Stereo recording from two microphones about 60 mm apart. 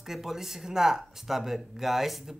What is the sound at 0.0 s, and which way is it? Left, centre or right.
Speech, centre.